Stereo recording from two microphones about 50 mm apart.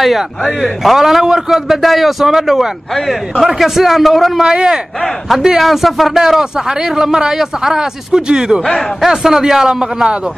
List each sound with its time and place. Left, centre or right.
0.0 s a man's voice: centre
4.5 s speech: centre
5.6 s speech: centre
8.6 s a man's voice: centre
9.0 s speech: centre